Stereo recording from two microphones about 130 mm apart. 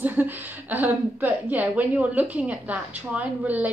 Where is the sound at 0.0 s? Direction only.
15° right (ahead or behind).